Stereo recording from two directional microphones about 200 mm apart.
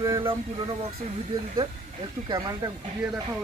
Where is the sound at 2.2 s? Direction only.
20° right (ahead or behind).